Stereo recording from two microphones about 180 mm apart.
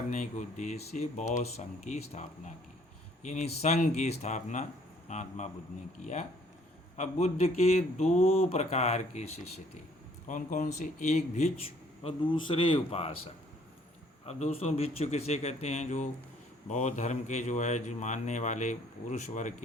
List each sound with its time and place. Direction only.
0.1 s speech: 40° left (ahead or behind)
6.9 s speech: 40° left (ahead or behind)
12.0 s speech: 25° left (ahead or behind)
14.3 s speech: 35° left (ahead or behind)